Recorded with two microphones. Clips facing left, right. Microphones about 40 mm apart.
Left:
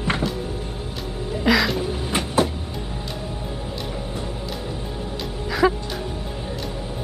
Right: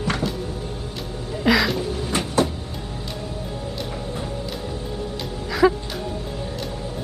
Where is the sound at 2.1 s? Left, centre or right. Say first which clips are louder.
Even; left.